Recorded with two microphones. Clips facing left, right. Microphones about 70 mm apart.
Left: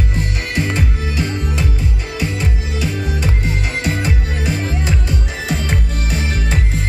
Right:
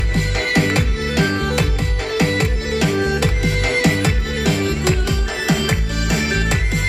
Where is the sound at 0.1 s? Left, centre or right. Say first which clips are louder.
Right 4 dB; right.